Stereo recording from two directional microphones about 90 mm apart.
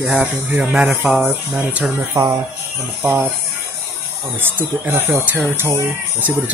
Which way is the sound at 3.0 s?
25° right (ahead or behind).